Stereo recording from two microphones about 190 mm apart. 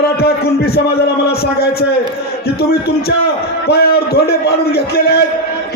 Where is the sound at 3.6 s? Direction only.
55° left (ahead or behind).